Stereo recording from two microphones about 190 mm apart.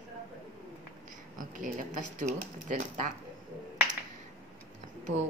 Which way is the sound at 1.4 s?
45° right (ahead or behind).